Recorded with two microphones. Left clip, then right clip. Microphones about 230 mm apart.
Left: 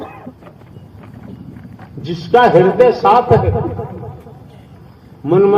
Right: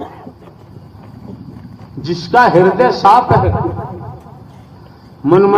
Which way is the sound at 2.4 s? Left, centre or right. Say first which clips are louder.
Even; right.